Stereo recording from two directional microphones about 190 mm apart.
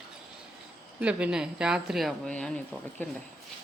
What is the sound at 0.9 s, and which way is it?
A woman's voice, 5° right (ahead or behind).